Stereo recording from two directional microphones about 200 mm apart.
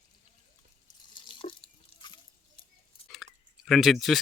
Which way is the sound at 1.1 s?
25° left (ahead or behind).